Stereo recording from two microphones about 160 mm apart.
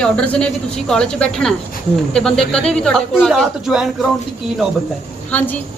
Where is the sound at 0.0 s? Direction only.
5° left (ahead or behind).